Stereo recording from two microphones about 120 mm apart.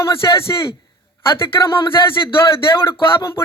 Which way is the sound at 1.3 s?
45° left (ahead or behind).